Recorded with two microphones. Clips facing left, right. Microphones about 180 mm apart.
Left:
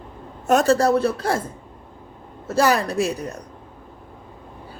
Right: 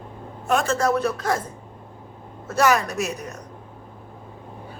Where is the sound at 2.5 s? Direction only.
30° left (ahead or behind).